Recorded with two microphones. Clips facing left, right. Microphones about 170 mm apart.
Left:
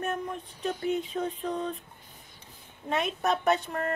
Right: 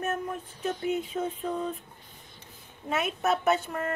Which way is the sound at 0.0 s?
5° right (ahead or behind).